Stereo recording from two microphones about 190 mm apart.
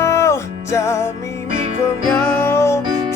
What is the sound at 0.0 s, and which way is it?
Music, 15° left (ahead or behind).